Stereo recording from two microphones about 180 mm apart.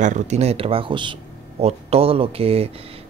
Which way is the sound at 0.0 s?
40° right (ahead or behind).